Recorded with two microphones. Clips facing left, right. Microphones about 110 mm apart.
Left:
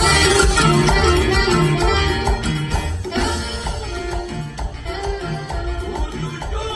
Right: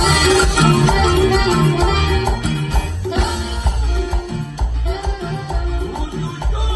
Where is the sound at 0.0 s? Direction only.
Centre (ahead or behind).